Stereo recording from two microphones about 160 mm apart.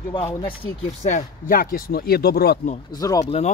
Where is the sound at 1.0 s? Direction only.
55° left (ahead or behind); by 2.6 s 80° left.